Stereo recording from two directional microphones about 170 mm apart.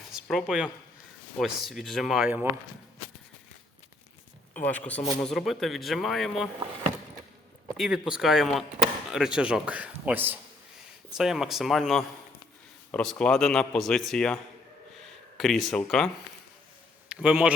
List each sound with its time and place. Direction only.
0.1 s a man's voice: centre (ahead or behind)
4.6 s a man's voice: 10° left (ahead or behind)
7.8 s a man's voice: 5° right (ahead or behind)
14.9 s a sound: centre (ahead or behind)
15.8 s a man's voice: 5° left (ahead or behind)
17.1 s a man's voice: 5° right (ahead or behind)